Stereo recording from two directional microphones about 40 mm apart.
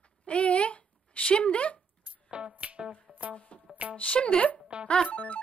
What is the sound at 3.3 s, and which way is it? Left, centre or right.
Speech, left.